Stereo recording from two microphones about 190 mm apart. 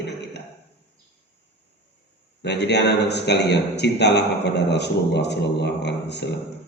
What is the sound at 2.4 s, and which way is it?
A man's voice, 65° left (ahead or behind).